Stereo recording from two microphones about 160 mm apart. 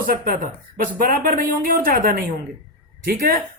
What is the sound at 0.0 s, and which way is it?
Speech, 60° right (ahead or behind).